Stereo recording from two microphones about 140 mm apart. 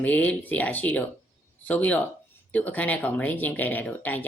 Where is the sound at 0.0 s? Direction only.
10° left (ahead or behind).